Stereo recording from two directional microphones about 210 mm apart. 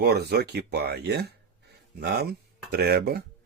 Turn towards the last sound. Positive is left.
turn(degrees=-50)  # may be behind; listen again after turning